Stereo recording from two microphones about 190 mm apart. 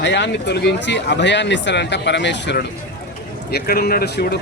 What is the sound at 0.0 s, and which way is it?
Speech, 70° left (ahead or behind).